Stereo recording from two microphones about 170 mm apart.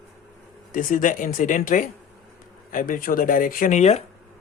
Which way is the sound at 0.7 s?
50° left (ahead or behind).